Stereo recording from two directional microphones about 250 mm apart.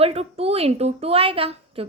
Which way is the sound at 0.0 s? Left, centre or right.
Right.